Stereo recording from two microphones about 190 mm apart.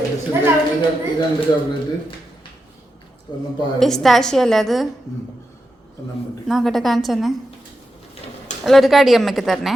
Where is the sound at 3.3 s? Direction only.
25° left (ahead or behind).